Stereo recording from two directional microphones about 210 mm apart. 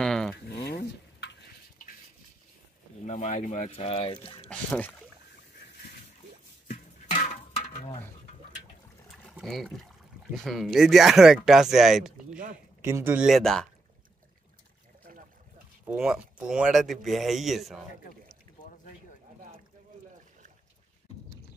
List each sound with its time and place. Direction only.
0.0 s a sound: 5° left (ahead or behind)
0.7 s stir: 50° left (ahead or behind)
3.1 s speech: 35° left (ahead or behind)
4.5 s speech: 5° left (ahead or behind)
7.1 s a sound: 35° left (ahead or behind)
9.1 s trickle: centre (ahead or behind)
10.3 s speech: centre (ahead or behind)
12.8 s speech: 10° right (ahead or behind)
15.8 s speech: 5° right (ahead or behind)